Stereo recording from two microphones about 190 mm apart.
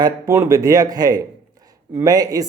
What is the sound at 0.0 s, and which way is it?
Speech, 15° right (ahead or behind).